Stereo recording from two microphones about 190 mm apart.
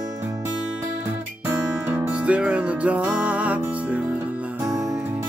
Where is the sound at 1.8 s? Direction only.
5° right (ahead or behind).